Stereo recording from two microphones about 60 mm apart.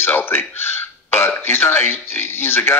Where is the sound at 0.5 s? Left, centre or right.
Left.